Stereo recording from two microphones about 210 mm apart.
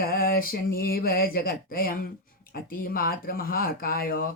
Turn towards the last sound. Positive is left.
turn(degrees=45)  # may be behind; listen again after turning